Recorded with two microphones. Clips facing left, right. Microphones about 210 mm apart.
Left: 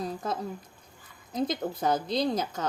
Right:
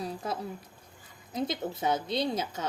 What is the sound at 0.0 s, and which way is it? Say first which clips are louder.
A woman's voice: left 2 dB; 10° right (ahead or behind).